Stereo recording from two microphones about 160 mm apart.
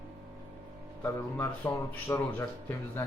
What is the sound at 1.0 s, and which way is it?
Speech, 10° left (ahead or behind).